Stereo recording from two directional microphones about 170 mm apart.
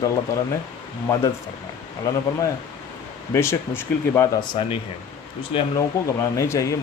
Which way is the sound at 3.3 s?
15° left (ahead or behind).